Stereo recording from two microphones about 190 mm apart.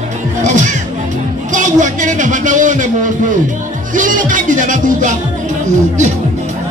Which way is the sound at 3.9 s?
45° right (ahead or behind).